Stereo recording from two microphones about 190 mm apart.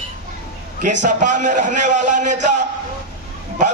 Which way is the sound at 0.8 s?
40° right (ahead or behind).